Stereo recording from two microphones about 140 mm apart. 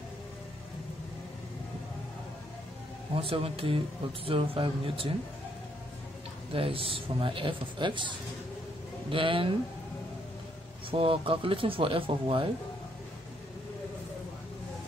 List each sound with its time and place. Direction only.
3.2 s speech: 40° right (ahead or behind)
6.5 s speech: 40° right (ahead or behind)
9.1 s speech: 40° right (ahead or behind)
10.9 s speech: 40° right (ahead or behind)